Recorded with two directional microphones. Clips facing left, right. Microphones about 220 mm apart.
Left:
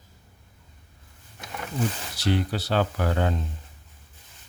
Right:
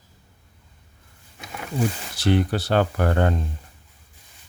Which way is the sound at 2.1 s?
55° right (ahead or behind).